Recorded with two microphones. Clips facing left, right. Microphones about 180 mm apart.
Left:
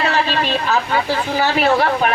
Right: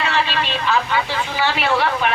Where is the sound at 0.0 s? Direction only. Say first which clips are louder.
Left 3 dB; 40° left (ahead or behind).